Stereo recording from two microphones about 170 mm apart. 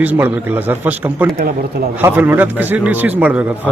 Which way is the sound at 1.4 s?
65° right (ahead or behind).